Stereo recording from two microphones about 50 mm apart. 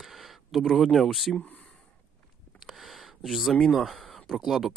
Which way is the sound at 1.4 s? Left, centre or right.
Left.